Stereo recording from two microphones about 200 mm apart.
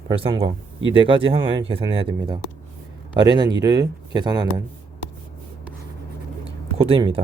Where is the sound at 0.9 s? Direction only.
25° right (ahead or behind).